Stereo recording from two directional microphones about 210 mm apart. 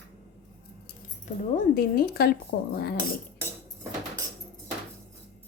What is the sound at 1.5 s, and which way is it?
A woman's voice, 45° left (ahead or behind).